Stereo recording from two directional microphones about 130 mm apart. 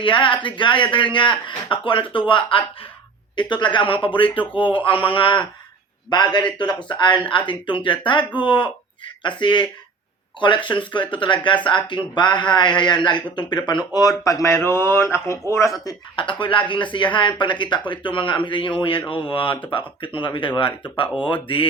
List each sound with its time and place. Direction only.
0.0 s a man's voice: 40° left (ahead or behind); by 15.7 s 20° left (ahead or behind)
16.1 s a man's voice: 40° left (ahead or behind)